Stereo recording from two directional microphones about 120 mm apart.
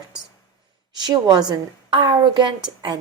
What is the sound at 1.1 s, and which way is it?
A woman's voice, 35° right (ahead or behind).